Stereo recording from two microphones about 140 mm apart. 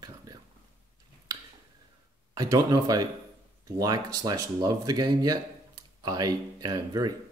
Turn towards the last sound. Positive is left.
turn(degrees=-25)  # may be behind; listen again after turning